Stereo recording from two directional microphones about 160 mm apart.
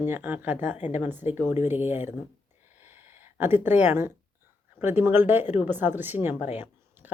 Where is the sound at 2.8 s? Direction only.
15° right (ahead or behind).